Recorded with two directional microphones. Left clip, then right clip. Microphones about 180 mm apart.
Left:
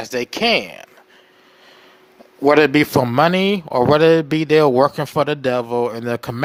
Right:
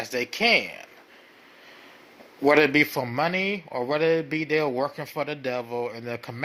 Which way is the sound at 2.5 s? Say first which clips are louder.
Left 6 dB; 75° left (ahead or behind).